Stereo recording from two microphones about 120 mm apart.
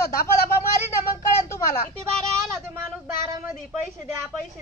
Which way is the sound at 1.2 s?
25° left (ahead or behind).